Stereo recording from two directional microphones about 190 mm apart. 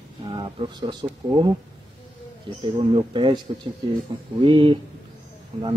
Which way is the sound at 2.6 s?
25° right (ahead or behind).